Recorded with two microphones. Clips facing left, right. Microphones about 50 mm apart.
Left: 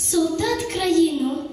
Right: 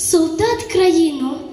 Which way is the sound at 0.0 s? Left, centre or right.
Right.